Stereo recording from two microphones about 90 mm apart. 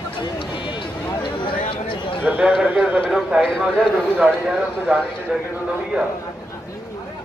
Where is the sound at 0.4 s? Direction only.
70° left (ahead or behind).